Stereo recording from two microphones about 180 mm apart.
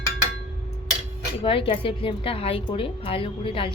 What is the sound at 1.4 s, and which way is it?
A woman's voice, 30° left (ahead or behind).